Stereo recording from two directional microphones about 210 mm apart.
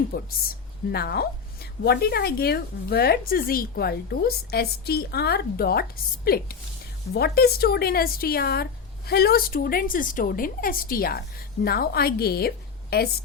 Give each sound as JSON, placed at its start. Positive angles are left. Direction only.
{"t": 0.1, "sound": "a woman's voice", "side_deg": 45}